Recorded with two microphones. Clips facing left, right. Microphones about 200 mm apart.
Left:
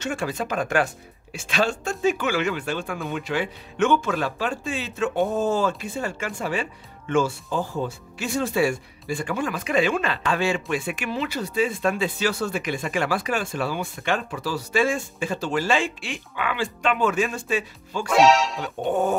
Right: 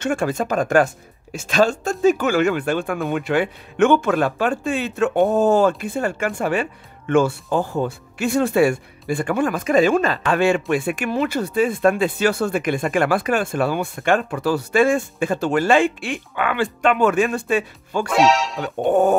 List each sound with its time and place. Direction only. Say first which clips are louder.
0.0 s speech: right 6 dB; 50° right (ahead or behind)
10.3 s speech: right 7 dB; 55° right (ahead or behind)
18.0 s speech: even; centre (ahead or behind)
18.8 s speech: right 7 dB; 50° right (ahead or behind)